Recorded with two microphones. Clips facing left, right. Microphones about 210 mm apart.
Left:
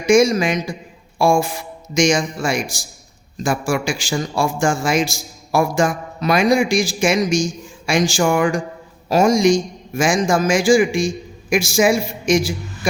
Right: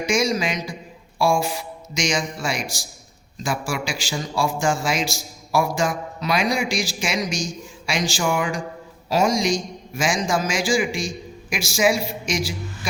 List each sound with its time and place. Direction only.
0.0 s a man's voice: 50° left (ahead or behind)